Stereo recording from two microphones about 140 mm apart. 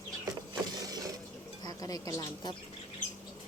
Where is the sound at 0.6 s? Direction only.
30° right (ahead or behind).